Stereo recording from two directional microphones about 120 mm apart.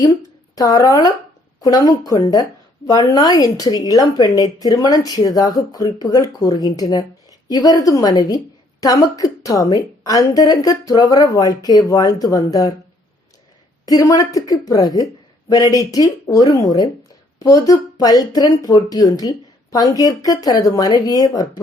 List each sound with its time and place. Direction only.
0.5 s speech: 30° left (ahead or behind)
13.8 s speech: 30° left (ahead or behind)